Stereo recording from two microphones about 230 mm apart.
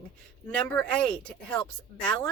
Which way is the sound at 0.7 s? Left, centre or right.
Centre.